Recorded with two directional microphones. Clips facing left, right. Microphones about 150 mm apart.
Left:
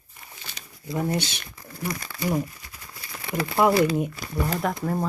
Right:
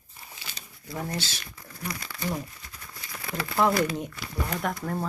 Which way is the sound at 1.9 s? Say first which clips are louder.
Left 4 dB; 45° left (ahead or behind).